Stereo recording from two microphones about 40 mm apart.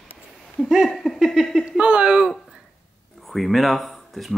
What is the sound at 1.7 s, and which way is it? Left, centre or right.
Speech, right.